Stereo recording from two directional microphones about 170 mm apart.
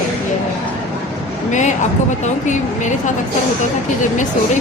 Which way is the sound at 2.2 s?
45° left (ahead or behind).